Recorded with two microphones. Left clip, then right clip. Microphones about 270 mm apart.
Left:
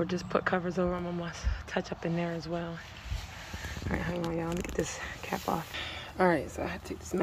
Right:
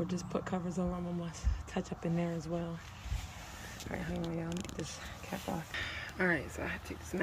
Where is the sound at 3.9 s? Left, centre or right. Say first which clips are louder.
Left 6 dB; centre.